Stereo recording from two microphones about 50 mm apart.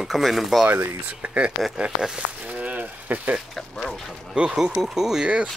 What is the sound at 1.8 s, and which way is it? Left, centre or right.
Speech, centre.